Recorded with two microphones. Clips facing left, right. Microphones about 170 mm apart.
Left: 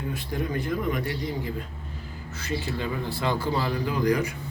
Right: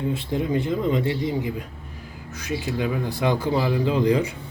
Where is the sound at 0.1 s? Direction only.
25° right (ahead or behind).